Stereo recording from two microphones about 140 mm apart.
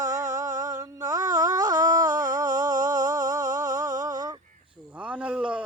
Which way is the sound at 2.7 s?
65° right (ahead or behind).